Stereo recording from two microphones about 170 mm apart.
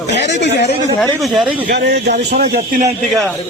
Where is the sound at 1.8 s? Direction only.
75° right (ahead or behind).